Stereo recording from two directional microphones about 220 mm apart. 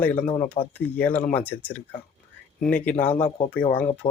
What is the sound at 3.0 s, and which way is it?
Speech, 30° left (ahead or behind).